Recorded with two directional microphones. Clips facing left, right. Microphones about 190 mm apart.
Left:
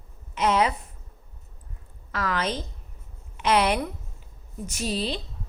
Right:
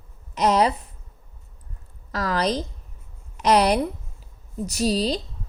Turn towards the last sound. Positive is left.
turn(degrees=-40)  # may be behind; listen again after turning